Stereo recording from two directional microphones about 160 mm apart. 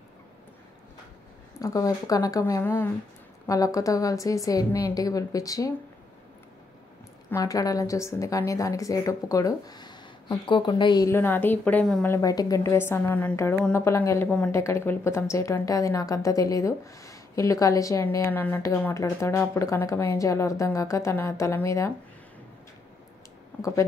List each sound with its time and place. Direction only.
1.6 s speech: 20° left (ahead or behind)
7.2 s speech: 20° left (ahead or behind)
12.1 s a woman's voice: 20° left (ahead or behind)